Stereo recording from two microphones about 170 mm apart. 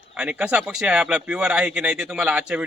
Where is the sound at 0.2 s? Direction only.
5° right (ahead or behind).